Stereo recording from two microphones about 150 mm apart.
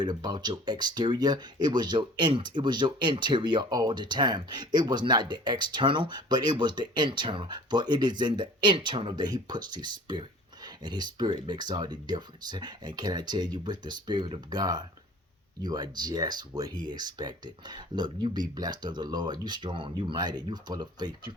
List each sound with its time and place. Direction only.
0.0 s speech: 30° right (ahead or behind)